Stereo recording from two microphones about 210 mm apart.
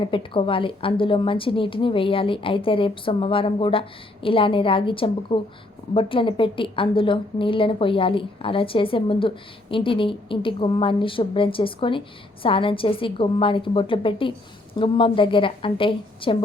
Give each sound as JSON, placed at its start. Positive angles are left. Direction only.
{"t": 0.0, "sound": "a woman's voice", "side_deg": 25}